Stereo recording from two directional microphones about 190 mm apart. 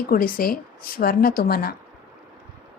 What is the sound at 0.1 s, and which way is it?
A woman's voice, 50° left (ahead or behind).